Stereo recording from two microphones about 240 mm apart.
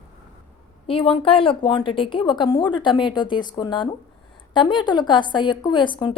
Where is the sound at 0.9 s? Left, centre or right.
Left.